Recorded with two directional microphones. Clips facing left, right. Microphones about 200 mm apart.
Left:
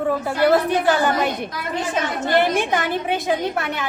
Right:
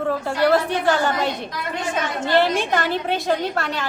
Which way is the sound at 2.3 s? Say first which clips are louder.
Even; 15° left (ahead or behind).